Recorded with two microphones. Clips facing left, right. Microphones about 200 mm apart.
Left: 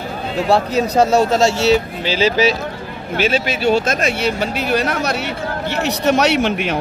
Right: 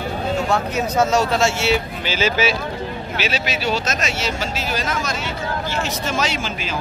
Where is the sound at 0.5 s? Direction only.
35° left (ahead or behind).